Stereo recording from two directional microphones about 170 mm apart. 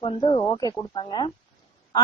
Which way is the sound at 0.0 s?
30° left (ahead or behind).